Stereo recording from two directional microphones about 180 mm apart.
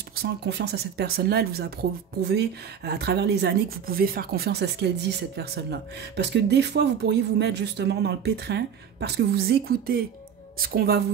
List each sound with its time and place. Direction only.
0.1 s a woman's voice: 65° right (ahead or behind)